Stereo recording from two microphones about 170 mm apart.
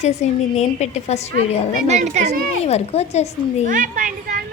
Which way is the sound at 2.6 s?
40° left (ahead or behind).